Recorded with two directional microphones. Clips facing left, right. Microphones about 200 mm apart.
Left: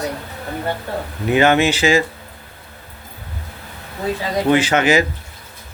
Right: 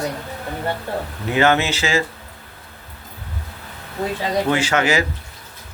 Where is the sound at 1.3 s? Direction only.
15° left (ahead or behind).